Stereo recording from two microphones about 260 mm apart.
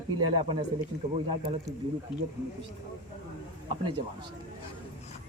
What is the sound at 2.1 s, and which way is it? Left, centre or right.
Speech, centre.